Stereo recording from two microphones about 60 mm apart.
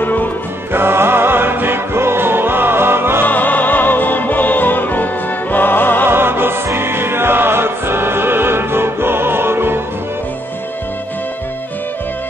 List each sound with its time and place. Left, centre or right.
0.0 s music: left
0.7 s music: right
3.3 s music: left
6.0 s music: right